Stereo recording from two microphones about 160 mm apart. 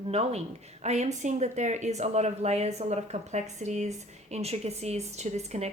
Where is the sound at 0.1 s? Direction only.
40° right (ahead or behind).